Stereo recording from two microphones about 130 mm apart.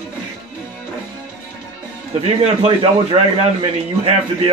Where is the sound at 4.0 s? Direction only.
50° right (ahead or behind).